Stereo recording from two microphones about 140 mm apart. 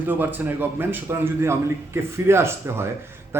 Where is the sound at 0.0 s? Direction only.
15° right (ahead or behind).